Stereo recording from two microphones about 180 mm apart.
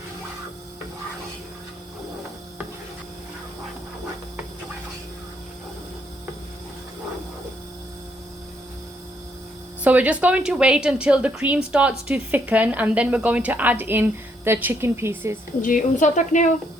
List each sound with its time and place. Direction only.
9.8 s a woman's voice: 10° right (ahead or behind)
15.6 s speech: 45° left (ahead or behind)